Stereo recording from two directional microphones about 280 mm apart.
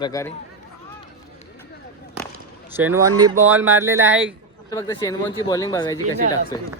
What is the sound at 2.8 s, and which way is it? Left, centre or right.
Speech, centre.